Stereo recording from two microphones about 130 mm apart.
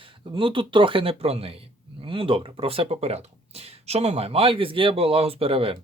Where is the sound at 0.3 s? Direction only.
40° right (ahead or behind).